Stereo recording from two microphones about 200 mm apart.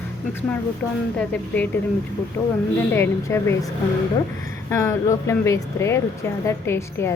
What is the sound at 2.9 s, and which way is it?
Speech, 10° left (ahead or behind).